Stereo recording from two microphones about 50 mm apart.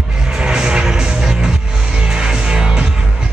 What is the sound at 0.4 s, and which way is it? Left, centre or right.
Music, centre.